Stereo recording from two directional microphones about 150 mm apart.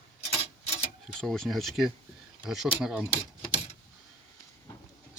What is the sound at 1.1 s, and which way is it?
Speech, 5° left (ahead or behind).